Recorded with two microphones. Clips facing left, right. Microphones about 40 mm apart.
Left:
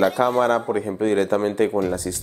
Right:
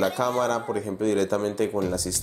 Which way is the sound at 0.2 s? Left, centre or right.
Left.